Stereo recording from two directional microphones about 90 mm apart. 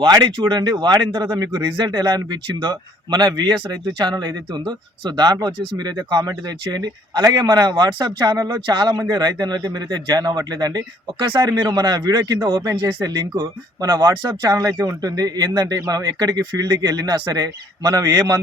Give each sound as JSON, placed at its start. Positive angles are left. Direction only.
{"t": 0.0, "sound": "speech", "side_deg": -55}
{"t": 8.6, "sound": "speech", "side_deg": -60}
{"t": 9.1, "sound": "speech", "side_deg": -50}